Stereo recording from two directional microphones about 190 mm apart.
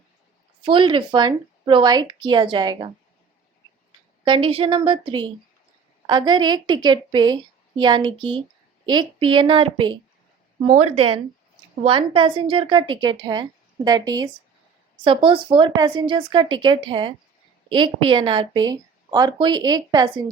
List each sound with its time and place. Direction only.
0.6 s a woman's voice: 25° right (ahead or behind)
4.2 s a woman's voice: 25° right (ahead or behind)